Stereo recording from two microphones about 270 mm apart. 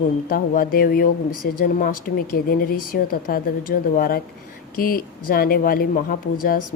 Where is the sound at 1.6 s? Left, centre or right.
Left.